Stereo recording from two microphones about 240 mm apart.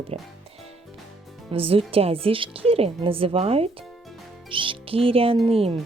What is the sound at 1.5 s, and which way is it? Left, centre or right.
Speech, right.